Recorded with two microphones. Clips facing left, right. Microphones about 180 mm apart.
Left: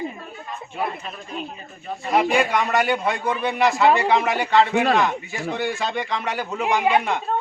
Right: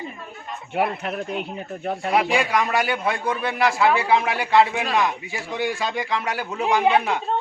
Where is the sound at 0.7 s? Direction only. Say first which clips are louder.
Right 6 dB; 70° right (ahead or behind).